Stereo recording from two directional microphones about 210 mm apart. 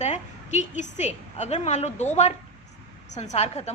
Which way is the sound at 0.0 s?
35° left (ahead or behind).